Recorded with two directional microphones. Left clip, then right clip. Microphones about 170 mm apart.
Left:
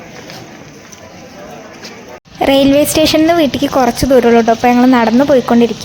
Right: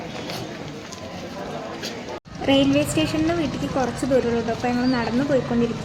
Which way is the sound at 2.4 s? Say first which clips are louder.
Left 10 dB; 90° left.